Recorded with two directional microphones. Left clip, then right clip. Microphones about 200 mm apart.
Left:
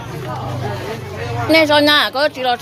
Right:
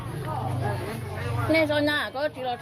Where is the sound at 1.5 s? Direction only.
20° left (ahead or behind).